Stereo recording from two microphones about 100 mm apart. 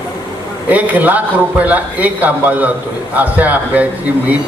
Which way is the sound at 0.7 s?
15° right (ahead or behind).